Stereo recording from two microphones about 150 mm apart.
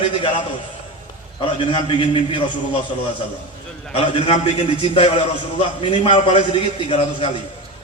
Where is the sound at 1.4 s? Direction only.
35° left (ahead or behind).